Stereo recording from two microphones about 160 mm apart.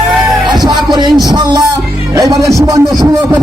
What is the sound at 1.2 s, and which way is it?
Speech, 25° right (ahead or behind).